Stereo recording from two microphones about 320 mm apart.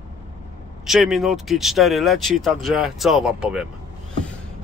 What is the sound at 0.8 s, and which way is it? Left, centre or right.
Speech, centre.